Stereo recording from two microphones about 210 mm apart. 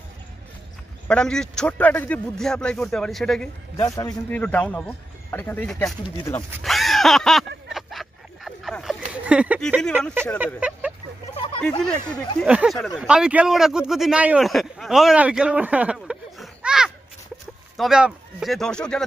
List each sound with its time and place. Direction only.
1.0 s a man's voice: 5° left (ahead or behind)
3.7 s a man's voice: 15° left (ahead or behind)
6.6 s a sound: centre (ahead or behind)
10.4 s speech: 5° right (ahead or behind)
11.3 s a sound: 25° left (ahead or behind)
11.8 s a man's voice: 5° left (ahead or behind)